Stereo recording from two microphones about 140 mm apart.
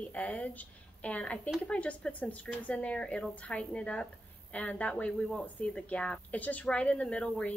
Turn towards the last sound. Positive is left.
turn(degrees=10)  # may be behind; listen again after turning